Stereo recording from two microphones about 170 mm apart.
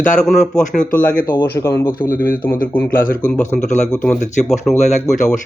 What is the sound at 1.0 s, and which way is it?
Speech, 10° left (ahead or behind).